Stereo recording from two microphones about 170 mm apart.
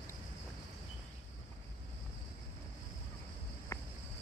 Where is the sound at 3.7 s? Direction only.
15° left (ahead or behind).